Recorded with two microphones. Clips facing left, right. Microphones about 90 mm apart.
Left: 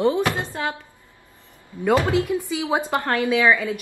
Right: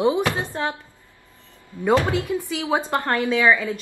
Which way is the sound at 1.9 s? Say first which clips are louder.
Left 1 dB; 20° left (ahead or behind).